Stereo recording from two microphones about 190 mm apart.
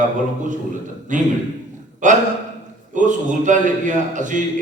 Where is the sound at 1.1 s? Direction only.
40° right (ahead or behind).